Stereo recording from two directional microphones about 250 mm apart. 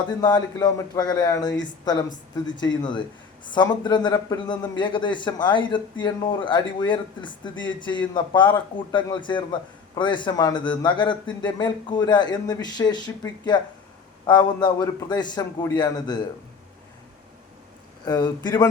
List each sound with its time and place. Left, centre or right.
0.2 s a man's voice: centre
18.0 s a man's voice: centre